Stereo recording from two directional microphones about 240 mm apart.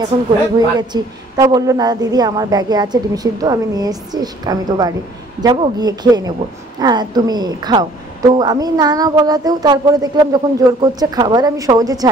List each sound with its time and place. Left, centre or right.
0.7 s a woman's voice: centre